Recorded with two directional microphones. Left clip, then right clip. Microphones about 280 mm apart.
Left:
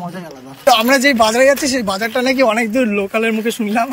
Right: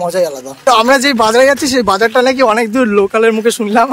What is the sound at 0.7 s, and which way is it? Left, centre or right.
Speech, centre.